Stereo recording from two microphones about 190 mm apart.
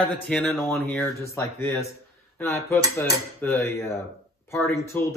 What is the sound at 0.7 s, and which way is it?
Mantra, 10° left (ahead or behind).